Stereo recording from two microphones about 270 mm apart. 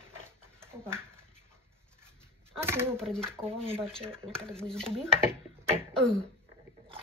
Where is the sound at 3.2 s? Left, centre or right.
Right.